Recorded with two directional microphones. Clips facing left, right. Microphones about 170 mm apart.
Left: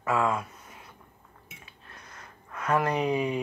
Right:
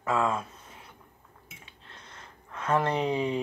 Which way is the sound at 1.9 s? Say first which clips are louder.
Left 1 dB; 25° right (ahead or behind).